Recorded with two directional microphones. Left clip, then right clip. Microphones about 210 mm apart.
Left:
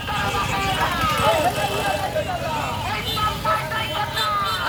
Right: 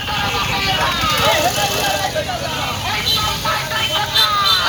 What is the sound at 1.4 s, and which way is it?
Vehicle, 40° left (ahead or behind).